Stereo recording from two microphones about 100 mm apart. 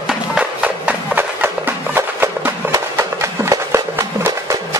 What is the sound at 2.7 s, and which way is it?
Music, 30° right (ahead or behind).